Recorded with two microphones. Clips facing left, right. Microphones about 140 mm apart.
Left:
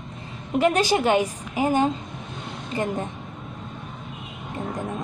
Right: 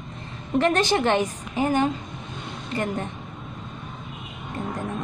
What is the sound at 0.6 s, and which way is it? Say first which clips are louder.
A woman's voice: left 1 dB; 10° left (ahead or behind).